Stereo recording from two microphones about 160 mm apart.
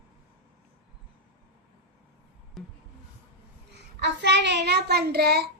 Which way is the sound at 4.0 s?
90° right.